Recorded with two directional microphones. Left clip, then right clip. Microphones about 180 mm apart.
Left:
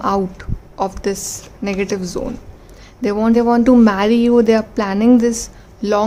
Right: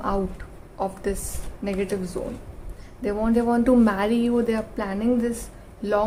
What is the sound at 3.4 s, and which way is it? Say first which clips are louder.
Speech: left 7 dB; 30° left (ahead or behind).